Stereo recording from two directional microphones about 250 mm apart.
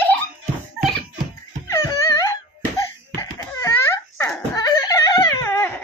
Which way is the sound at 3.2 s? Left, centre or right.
Centre.